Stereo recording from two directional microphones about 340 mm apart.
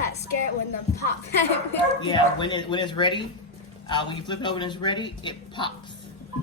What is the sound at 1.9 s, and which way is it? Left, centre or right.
Speech, centre.